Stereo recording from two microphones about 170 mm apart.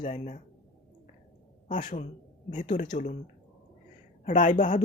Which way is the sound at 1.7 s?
50° left (ahead or behind).